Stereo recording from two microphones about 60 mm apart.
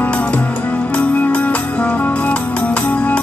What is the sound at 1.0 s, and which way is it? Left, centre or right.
Music, left.